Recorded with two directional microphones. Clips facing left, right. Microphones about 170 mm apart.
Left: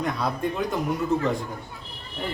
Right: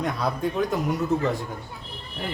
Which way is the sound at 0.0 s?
Centre (ahead or behind).